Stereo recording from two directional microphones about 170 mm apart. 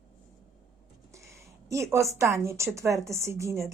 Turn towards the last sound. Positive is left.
turn(degrees=-15)  # may be behind; listen again after turning